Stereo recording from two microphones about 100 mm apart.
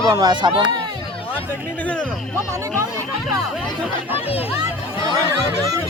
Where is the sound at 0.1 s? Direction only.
45° right (ahead or behind).